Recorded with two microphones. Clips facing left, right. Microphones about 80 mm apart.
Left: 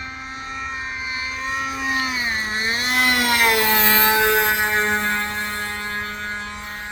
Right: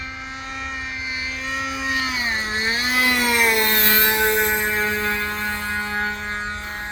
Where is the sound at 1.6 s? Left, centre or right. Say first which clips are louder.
Even; left.